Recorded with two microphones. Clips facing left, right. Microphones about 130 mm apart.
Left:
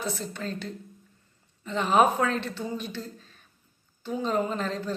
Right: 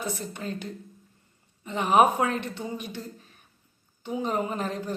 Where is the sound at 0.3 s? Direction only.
15° right (ahead or behind).